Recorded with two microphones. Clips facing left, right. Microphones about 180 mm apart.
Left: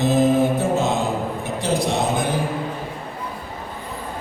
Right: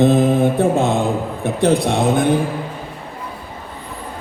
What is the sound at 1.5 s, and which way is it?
Speech, 55° right (ahead or behind).